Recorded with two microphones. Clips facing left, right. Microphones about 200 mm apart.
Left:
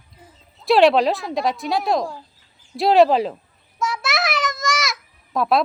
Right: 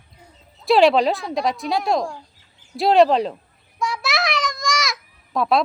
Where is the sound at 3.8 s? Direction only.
Centre (ahead or behind).